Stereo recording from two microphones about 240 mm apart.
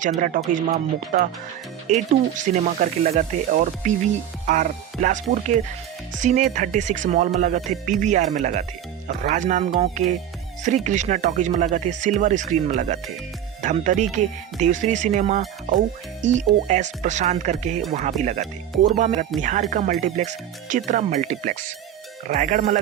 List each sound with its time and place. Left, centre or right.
0.2 s speech: right